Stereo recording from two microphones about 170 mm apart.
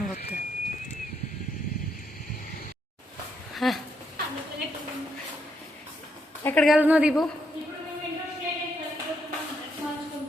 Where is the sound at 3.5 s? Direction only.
Centre (ahead or behind).